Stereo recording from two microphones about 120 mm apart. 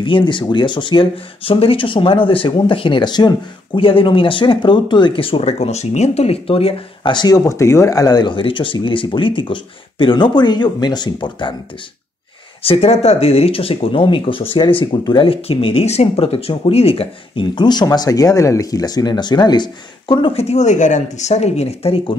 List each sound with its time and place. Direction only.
0.0 s speech: 45° left (ahead or behind)
7.0 s speech: 40° left (ahead or behind)
12.6 s speech: 60° left (ahead or behind); by 20.3 s 40° left (ahead or behind)
20.3 s speech: 65° left (ahead or behind)